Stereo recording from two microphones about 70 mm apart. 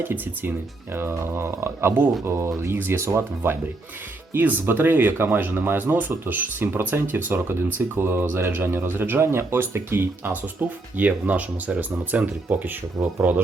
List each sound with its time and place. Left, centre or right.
0.0 s speech: right